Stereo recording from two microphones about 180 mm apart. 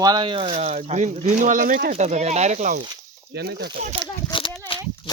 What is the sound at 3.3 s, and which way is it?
Speech, 65° right (ahead or behind).